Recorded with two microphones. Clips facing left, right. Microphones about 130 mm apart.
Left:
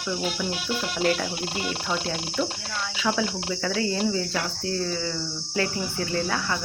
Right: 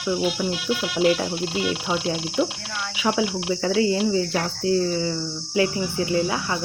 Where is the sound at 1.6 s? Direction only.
5° right (ahead or behind).